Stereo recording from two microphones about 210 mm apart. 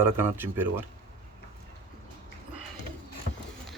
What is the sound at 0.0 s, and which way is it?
Speech, 10° right (ahead or behind).